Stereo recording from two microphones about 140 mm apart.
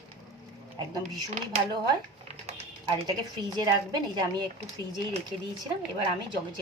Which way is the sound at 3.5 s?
30° right (ahead or behind).